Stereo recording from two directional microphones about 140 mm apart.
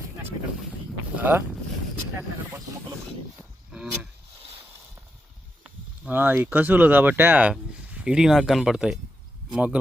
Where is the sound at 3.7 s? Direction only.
5° right (ahead or behind).